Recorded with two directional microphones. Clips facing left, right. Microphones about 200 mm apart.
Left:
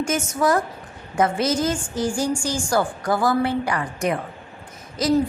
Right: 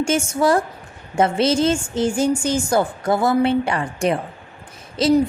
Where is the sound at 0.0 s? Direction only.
30° right (ahead or behind).